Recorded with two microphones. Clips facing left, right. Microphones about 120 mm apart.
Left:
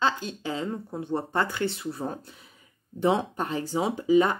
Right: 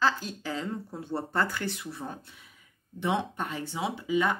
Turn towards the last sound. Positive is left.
turn(degrees=40)  # may be behind; listen again after turning